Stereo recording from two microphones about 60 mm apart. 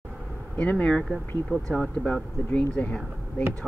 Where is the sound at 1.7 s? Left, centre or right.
Centre.